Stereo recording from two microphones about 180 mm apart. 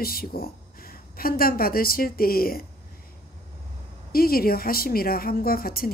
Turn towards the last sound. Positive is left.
turn(degrees=55)  # may be behind; listen again after turning